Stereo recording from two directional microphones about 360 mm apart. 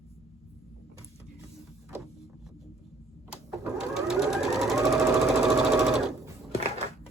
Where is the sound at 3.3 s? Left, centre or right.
Centre.